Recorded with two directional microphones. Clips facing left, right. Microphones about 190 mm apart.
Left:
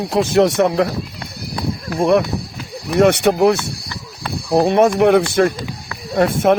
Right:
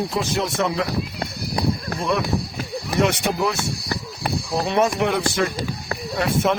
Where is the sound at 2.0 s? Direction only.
55° left (ahead or behind).